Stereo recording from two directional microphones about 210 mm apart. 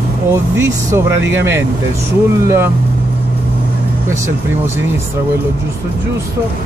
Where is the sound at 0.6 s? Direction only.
15° right (ahead or behind).